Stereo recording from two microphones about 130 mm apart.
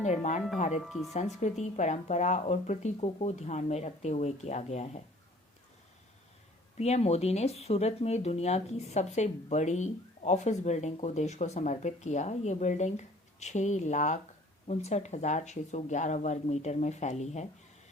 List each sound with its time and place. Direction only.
0.0 s speech: 65° left (ahead or behind)
0.8 s speech: centre (ahead or behind)
1.4 s speech: 60° left (ahead or behind)
6.7 s speech: 55° left (ahead or behind)
14.7 s speech: 55° left (ahead or behind)